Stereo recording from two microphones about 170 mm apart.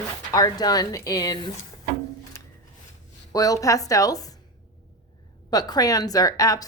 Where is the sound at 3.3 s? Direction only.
20° left (ahead or behind).